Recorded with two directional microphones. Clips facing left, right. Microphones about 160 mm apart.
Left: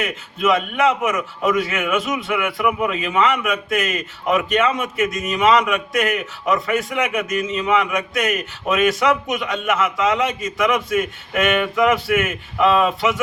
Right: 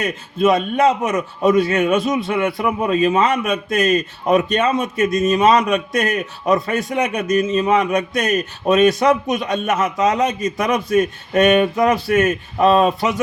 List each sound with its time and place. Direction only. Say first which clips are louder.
0.0 s a man's voice: right 4 dB; 35° right (ahead or behind)